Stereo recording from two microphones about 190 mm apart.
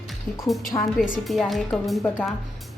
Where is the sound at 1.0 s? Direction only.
Centre (ahead or behind).